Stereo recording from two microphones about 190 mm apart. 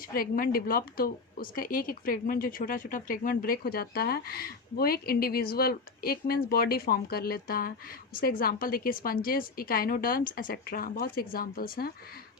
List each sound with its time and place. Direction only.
0.1 s a woman's voice: 50° left (ahead or behind)